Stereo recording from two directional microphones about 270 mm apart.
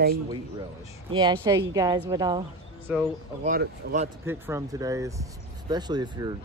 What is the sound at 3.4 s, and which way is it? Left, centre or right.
Speech, right.